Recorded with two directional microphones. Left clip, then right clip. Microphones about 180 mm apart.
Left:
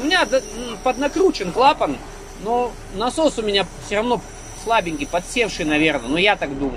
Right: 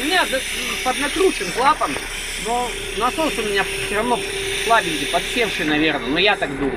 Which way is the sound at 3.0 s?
15° left (ahead or behind).